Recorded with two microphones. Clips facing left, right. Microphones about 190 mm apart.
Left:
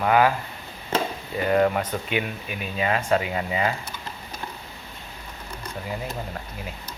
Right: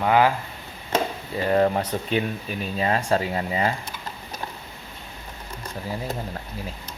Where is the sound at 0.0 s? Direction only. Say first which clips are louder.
Even; 25° right (ahead or behind).